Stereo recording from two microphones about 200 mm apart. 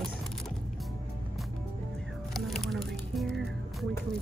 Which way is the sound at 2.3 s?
Centre (ahead or behind).